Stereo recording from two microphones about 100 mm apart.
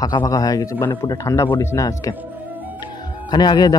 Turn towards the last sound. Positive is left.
turn(degrees=45)  # may be behind; listen again after turning